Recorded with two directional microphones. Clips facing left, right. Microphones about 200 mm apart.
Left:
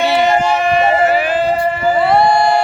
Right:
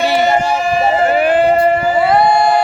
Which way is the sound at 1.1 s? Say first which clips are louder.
Right 3 dB; 55° right (ahead or behind).